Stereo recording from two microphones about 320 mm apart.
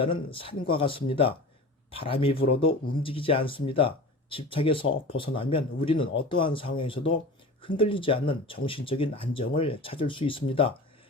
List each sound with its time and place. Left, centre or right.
0.0 s speech: centre